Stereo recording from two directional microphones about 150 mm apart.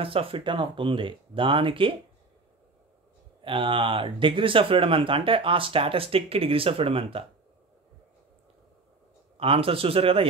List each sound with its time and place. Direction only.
0.0 s speech: 35° right (ahead or behind)
3.4 s speech: 35° right (ahead or behind)
9.4 s speech: 40° right (ahead or behind)